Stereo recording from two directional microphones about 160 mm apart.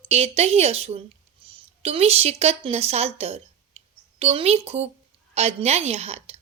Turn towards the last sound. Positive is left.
turn(degrees=-40)  # may be behind; listen again after turning